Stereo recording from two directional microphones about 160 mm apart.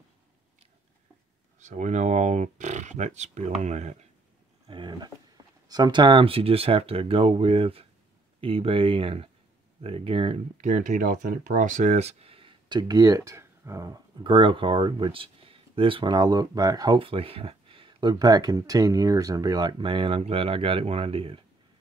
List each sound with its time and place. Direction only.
1.6 s speech: 50° right (ahead or behind)
4.6 s speech: 30° right (ahead or behind)